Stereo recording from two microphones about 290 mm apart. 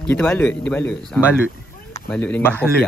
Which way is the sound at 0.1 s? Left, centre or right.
Centre.